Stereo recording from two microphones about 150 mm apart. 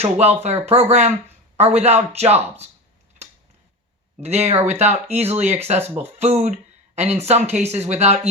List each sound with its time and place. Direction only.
0.0 s speech: 45° right (ahead or behind)
4.2 s speech: 45° right (ahead or behind)
5.8 s speech: 15° right (ahead or behind)
6.1 s speech: 45° right (ahead or behind)